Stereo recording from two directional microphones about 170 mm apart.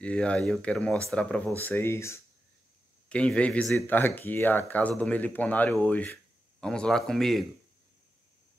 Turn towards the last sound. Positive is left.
turn(degrees=0)  # may be behind; listen again after turning